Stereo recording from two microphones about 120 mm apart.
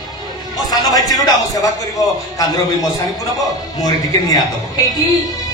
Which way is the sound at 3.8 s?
30° left (ahead or behind).